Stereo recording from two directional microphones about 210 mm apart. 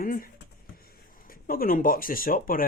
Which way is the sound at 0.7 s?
45° left (ahead or behind).